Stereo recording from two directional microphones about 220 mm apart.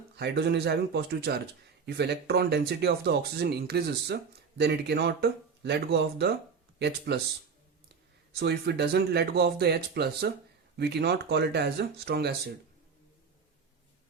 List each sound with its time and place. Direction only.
0.2 s speech: 50° right (ahead or behind)
8.4 s speech: 45° right (ahead or behind)